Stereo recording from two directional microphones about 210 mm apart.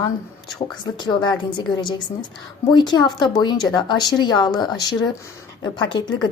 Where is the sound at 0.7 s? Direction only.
20° left (ahead or behind).